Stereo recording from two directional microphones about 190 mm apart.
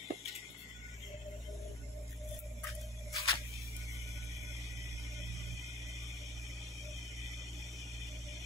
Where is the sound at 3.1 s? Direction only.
15° left (ahead or behind).